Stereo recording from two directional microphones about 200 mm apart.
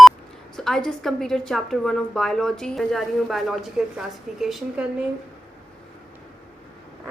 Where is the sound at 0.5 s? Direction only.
Centre (ahead or behind).